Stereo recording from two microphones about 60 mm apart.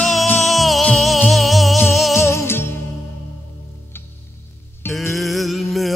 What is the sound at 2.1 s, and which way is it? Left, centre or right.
Music, left.